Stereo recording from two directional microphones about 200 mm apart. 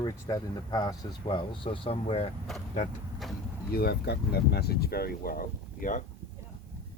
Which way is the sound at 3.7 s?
50° left (ahead or behind).